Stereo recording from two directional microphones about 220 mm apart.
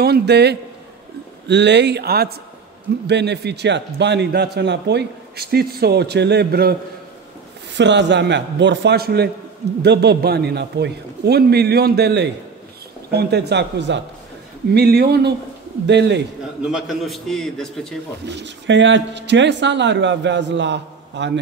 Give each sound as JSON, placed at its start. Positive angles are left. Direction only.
{"t": 0.0, "sound": "a man's voice", "side_deg": -50}
{"t": 7.7, "sound": "a man's voice", "side_deg": -55}
{"t": 16.7, "sound": "a man's voice", "side_deg": 0}
{"t": 18.2, "sound": "a man's voice", "side_deg": -50}